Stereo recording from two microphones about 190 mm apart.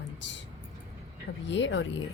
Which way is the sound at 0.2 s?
70° left (ahead or behind).